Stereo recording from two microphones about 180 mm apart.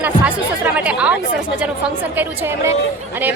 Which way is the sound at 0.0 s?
10° right (ahead or behind).